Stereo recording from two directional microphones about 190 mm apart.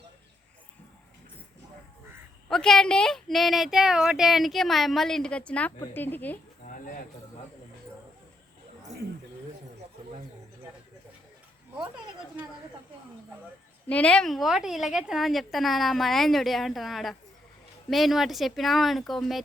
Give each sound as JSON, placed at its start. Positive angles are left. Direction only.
{"t": 2.5, "sound": "a woman's voice", "side_deg": 5}
{"t": 6.7, "sound": "bird", "side_deg": 45}
{"t": 13.8, "sound": "a woman's voice", "side_deg": 5}